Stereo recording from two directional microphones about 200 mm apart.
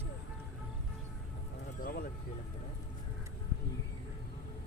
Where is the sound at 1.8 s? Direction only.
45° left (ahead or behind).